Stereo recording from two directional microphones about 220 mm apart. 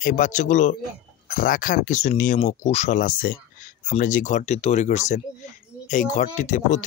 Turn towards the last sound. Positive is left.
turn(degrees=35)  # may be behind; listen again after turning